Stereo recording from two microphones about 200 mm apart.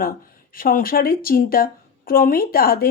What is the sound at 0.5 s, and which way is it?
A woman's voice, 45° left (ahead or behind).